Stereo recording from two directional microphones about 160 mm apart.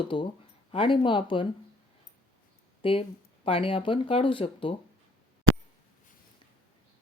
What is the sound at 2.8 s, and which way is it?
Speech, 35° left (ahead or behind).